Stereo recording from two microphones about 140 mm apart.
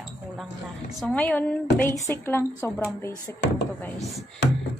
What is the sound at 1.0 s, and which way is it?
Speech, 10° left (ahead or behind).